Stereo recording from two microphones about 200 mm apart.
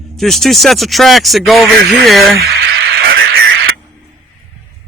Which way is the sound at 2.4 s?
50° right (ahead or behind).